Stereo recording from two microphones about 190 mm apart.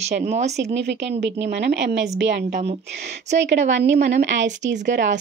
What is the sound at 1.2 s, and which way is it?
Speech, 65° right (ahead or behind).